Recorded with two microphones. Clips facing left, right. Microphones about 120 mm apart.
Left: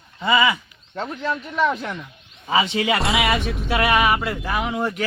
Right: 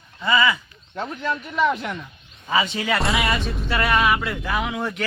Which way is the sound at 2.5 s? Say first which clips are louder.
Left 2 dB; 20° left (ahead or behind).